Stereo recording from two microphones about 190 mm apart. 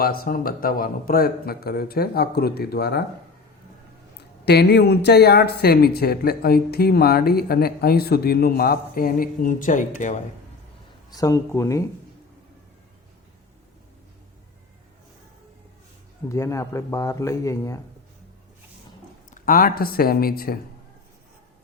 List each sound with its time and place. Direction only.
0.0 s a man's voice: 50° left (ahead or behind)
4.4 s speech: 60° left (ahead or behind); by 9.8 s 45° left (ahead or behind)
11.1 s speech: 20° left (ahead or behind)
16.3 s speech: 15° left (ahead or behind)
19.3 s a man's voice: 50° left (ahead or behind)